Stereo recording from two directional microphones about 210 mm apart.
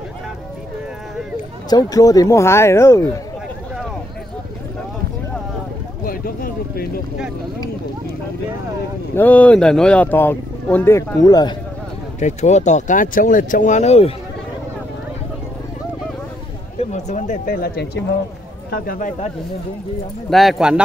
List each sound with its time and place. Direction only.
1.7 s speech: 15° left (ahead or behind)
6.0 s a sound: 45° left (ahead or behind)
9.1 s speech: 10° left (ahead or behind)
12.2 s speech: 35° left (ahead or behind)
16.9 s speech: 35° left (ahead or behind)
18.9 s speech: 40° left (ahead or behind)
20.2 s speech: centre (ahead or behind)